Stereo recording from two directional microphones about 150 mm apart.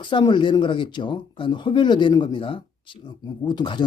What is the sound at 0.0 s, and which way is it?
Speech, 30° left (ahead or behind).